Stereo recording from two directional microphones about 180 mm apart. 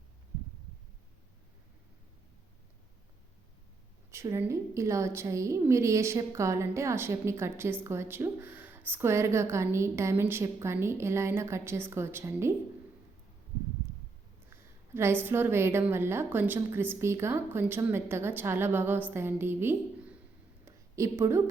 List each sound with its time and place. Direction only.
4.1 s a woman's voice: 15° right (ahead or behind)
14.5 s a woman's voice: 15° right (ahead or behind)
20.7 s a sound: 15° right (ahead or behind)